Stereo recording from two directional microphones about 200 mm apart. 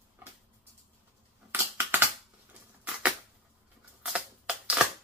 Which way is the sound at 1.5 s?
10° right (ahead or behind).